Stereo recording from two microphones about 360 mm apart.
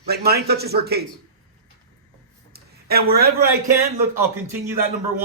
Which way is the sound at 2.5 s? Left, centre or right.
Right.